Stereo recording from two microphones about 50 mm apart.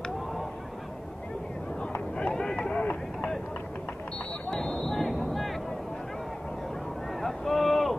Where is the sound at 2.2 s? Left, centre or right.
Centre.